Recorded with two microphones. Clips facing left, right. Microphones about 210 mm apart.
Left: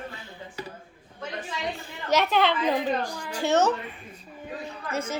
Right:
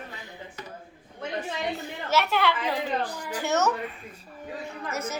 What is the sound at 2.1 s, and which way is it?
Speech, 20° left (ahead or behind).